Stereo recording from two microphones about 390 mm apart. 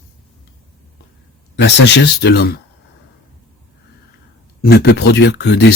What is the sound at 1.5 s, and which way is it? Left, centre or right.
Speech, left.